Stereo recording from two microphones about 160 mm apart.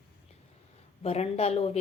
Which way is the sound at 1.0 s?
40° left (ahead or behind).